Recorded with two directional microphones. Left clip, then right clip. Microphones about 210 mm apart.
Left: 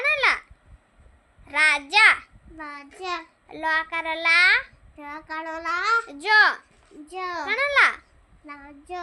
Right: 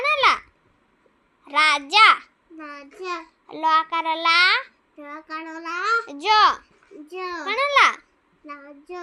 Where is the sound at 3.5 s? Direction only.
10° right (ahead or behind).